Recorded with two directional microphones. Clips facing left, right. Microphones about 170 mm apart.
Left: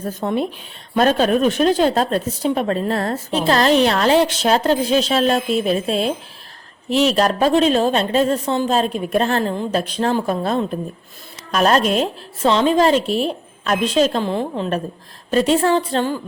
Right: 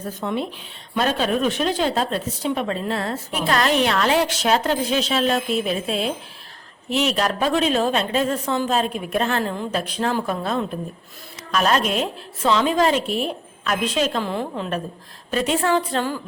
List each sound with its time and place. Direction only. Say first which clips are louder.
0.0 s a woman's voice: left 4 dB; 40° left (ahead or behind)
3.3 s a woman's voice: left 5 dB; 30° left (ahead or behind)